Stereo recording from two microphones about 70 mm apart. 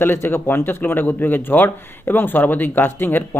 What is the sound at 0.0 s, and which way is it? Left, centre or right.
Speech, left.